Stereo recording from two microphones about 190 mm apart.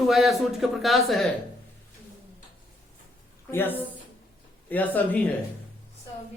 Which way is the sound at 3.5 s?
10° left (ahead or behind).